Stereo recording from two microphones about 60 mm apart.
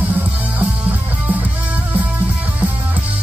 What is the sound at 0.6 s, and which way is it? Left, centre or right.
Music, right.